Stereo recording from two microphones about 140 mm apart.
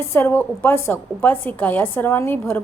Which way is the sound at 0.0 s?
15° left (ahead or behind).